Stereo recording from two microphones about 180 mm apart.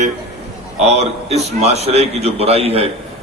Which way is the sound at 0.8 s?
35° right (ahead or behind).